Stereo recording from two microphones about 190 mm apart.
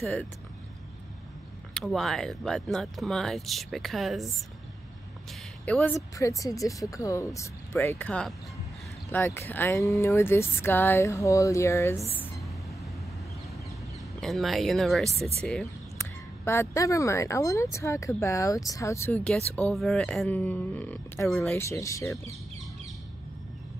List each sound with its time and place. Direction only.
0.0 s speech: 5° left (ahead or behind)
1.7 s speech: centre (ahead or behind)
5.7 s speech: 5° left (ahead or behind)
14.2 s speech: centre (ahead or behind)
21.5 s speech: 15° left (ahead or behind)